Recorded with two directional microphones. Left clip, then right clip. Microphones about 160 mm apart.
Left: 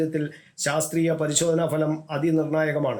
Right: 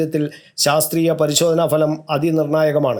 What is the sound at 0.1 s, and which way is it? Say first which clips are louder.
A man's voice: right 7 dB; 35° right (ahead or behind).